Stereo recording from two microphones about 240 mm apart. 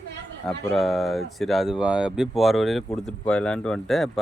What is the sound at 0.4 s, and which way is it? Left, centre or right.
Speech, centre.